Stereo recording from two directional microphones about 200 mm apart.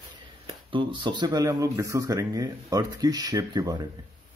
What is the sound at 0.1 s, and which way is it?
Speech, 25° right (ahead or behind).